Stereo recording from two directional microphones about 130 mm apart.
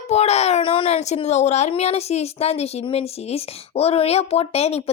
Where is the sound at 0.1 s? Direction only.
55° left (ahead or behind).